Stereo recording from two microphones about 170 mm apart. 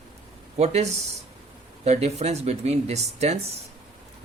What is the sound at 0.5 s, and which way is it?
Speech, 40° right (ahead or behind).